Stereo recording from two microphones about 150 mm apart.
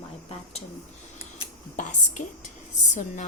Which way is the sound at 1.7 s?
55° left (ahead or behind).